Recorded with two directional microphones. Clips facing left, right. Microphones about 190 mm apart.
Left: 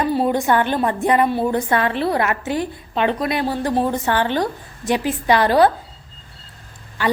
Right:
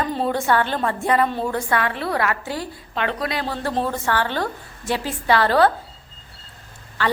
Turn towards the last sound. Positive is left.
turn(degrees=15)  # may be behind; listen again after turning